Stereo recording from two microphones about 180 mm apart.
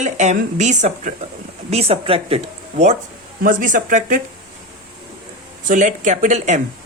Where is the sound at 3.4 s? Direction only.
45° right (ahead or behind).